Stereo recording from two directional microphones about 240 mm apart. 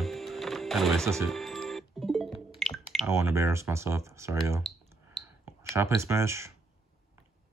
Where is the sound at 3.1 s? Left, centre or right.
Centre.